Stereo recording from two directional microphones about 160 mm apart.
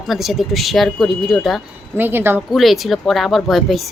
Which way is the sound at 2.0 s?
15° right (ahead or behind).